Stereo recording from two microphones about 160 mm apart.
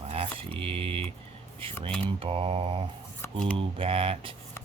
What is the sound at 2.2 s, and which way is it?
Mantra, 35° right (ahead or behind).